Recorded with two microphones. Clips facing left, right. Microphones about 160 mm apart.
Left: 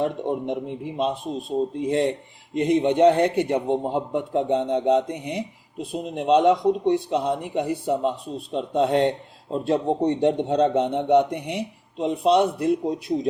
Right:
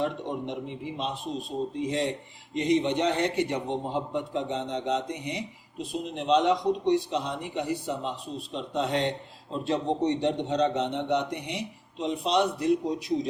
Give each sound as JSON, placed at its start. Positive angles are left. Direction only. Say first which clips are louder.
{"t": 0.0, "sound": "a man's voice", "louder": "left 5 dB", "side_deg": 50}